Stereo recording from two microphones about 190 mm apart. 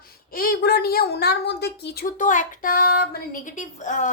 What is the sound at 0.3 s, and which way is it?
A woman's voice, 55° left (ahead or behind).